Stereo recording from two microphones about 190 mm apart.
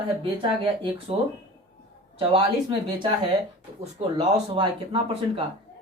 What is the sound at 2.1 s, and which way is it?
Speech, 30° right (ahead or behind).